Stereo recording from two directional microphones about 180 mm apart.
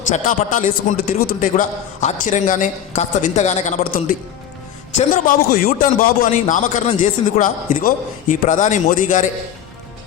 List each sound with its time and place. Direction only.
0.1 s a man's voice: 45° left (ahead or behind)
5.6 s a man's voice: 50° left (ahead or behind)